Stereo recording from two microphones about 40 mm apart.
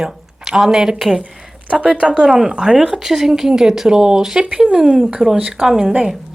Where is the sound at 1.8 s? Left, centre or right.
Right.